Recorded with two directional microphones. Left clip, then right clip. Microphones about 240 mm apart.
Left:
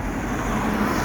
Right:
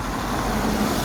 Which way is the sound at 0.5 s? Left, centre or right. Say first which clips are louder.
Left 3 dB; right.